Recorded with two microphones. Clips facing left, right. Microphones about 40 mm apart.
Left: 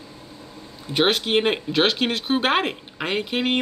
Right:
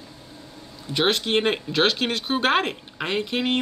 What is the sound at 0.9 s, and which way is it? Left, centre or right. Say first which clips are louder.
Speech: left 2 dB; centre.